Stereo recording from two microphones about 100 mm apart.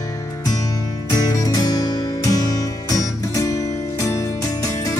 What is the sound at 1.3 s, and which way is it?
Music, 40° left (ahead or behind).